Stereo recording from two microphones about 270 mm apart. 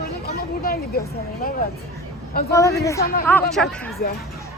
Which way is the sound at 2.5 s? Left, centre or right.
Centre.